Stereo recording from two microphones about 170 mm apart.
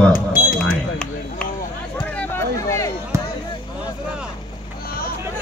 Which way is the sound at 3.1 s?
15° right (ahead or behind).